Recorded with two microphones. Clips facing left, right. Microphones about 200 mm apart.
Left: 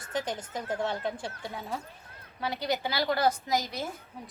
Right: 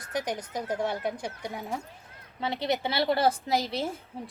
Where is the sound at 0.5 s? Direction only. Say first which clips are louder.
Right 1 dB; 10° right (ahead or behind).